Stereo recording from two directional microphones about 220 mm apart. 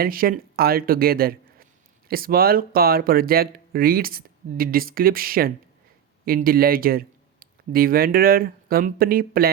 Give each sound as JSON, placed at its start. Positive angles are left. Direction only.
{"t": 0.0, "sound": "a man's voice", "side_deg": -40}